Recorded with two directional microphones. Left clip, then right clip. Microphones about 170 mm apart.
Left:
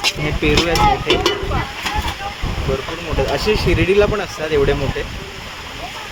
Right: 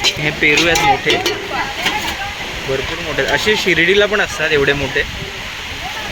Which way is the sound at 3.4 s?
5° right (ahead or behind).